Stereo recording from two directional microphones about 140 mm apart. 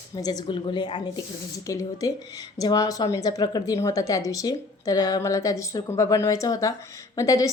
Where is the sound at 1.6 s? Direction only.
25° left (ahead or behind).